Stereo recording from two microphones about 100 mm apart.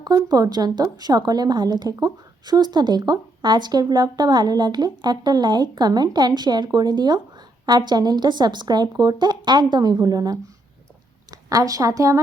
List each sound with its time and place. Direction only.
0.0 s a woman's voice: 45° right (ahead or behind)